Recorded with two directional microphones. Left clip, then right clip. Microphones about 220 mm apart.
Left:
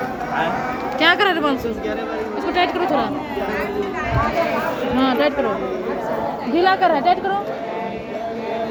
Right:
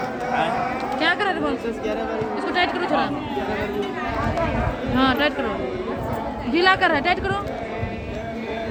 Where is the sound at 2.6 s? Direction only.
30° left (ahead or behind).